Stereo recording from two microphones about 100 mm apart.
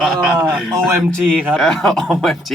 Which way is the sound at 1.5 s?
5° left (ahead or behind).